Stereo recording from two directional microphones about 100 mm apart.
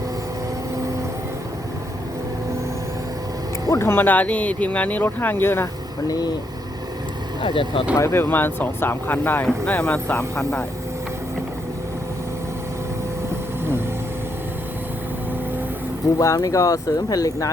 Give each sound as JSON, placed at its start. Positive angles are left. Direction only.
{"t": 3.7, "sound": "speech", "side_deg": 25}
{"t": 6.1, "sound": "speech", "side_deg": 40}
{"t": 7.4, "sound": "speech", "side_deg": 55}
{"t": 7.9, "sound": "speech", "side_deg": 25}
{"t": 16.1, "sound": "speech", "side_deg": 35}